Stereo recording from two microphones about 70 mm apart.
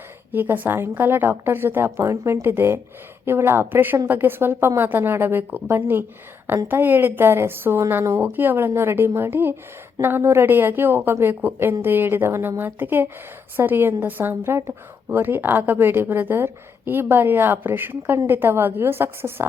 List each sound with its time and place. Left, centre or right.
0.3 s a woman's voice: right